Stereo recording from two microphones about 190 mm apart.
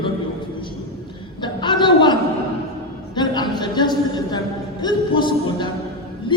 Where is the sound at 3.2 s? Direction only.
20° left (ahead or behind).